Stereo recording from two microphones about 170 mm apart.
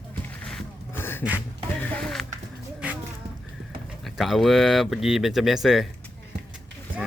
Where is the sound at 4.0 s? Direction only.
Centre (ahead or behind).